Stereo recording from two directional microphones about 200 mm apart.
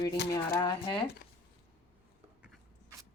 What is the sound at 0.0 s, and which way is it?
Speech, 20° left (ahead or behind).